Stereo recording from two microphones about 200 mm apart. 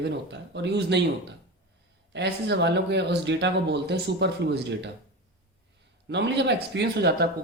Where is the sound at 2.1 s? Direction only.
60° right (ahead or behind).